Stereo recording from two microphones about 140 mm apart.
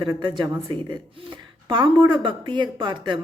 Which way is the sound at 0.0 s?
35° right (ahead or behind).